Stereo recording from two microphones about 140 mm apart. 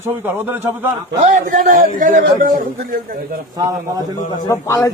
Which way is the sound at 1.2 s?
70° right (ahead or behind).